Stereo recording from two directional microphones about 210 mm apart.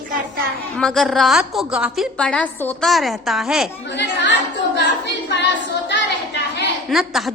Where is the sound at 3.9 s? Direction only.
55° left (ahead or behind).